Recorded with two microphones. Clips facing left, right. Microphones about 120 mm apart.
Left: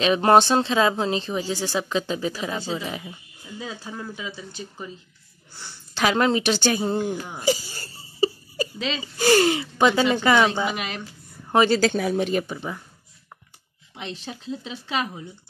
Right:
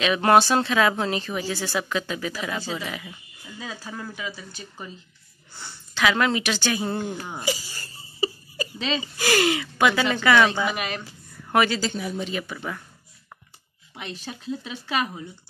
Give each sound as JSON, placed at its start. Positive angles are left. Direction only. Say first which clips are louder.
{"t": 0.0, "sound": "speech", "louder": "left 2 dB", "side_deg": 30}
{"t": 1.8, "sound": "a woman's voice", "louder": "left 3 dB", "side_deg": 25}
{"t": 5.9, "sound": "speech", "louder": "left 2 dB", "side_deg": 35}
{"t": 6.9, "sound": "a woman's voice", "louder": "left 4 dB", "side_deg": 10}
{"t": 7.4, "sound": "speech", "louder": "left 7 dB", "side_deg": 40}
{"t": 9.0, "sound": "speech", "louder": "left 5 dB", "side_deg": 35}
{"t": 10.3, "sound": "a woman's voice", "louder": "even", "side_deg": 15}
{"t": 11.4, "sound": "a sound", "louder": "left 2 dB", "side_deg": 25}
{"t": 11.8, "sound": "speech", "louder": "left 7 dB", "side_deg": 75}
{"t": 12.4, "sound": "speech", "louder": "left 1 dB", "side_deg": 20}
{"t": 14.2, "sound": "speech", "louder": "right 4 dB", "side_deg": 25}